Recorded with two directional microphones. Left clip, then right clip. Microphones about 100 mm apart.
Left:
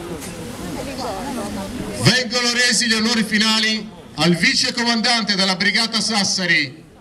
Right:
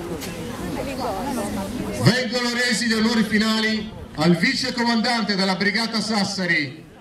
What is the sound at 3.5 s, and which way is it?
Speech, 70° left (ahead or behind).